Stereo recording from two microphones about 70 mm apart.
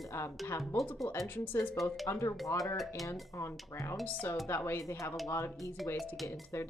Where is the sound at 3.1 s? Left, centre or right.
Left.